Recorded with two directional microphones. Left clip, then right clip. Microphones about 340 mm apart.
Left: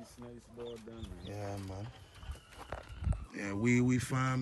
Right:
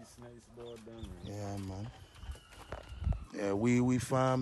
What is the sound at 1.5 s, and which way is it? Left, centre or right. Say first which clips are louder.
Speech: even; right.